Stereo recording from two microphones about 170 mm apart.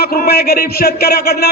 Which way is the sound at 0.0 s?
65° left (ahead or behind).